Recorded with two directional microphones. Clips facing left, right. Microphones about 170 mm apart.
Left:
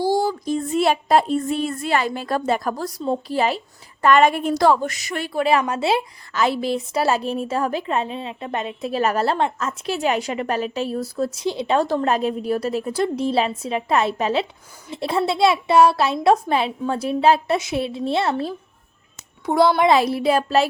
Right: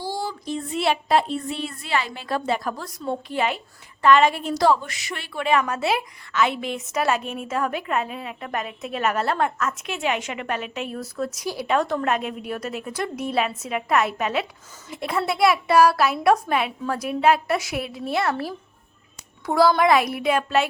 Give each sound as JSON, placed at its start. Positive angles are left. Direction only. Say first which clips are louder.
{"t": 0.0, "sound": "speech", "louder": "left 9 dB", "side_deg": 45}
{"t": 4.0, "sound": "a woman's voice", "louder": "left 2 dB", "side_deg": 50}